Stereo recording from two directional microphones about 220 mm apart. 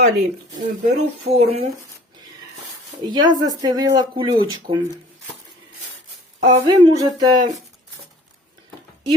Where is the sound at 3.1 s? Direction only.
20° right (ahead or behind).